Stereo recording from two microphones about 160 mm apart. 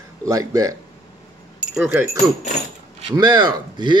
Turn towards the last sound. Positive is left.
turn(degrees=-30)  # may be behind; listen again after turning